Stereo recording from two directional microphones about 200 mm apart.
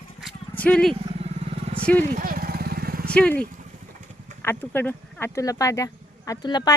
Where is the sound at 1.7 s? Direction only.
30° right (ahead or behind).